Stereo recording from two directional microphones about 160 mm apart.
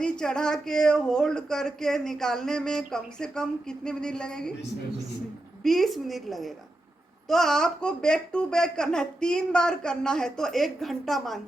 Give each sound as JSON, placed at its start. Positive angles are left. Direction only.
{"t": 0.0, "sound": "speech", "side_deg": 5}
{"t": 5.6, "sound": "speech", "side_deg": 0}